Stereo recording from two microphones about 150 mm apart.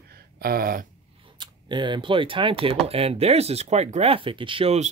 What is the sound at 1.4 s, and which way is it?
Speech, 30° right (ahead or behind).